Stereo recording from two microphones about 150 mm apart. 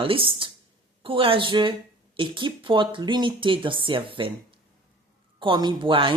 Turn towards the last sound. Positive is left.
turn(degrees=-35)  # may be behind; listen again after turning